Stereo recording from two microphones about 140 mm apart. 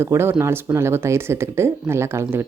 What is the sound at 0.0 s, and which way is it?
Speech, 20° right (ahead or behind).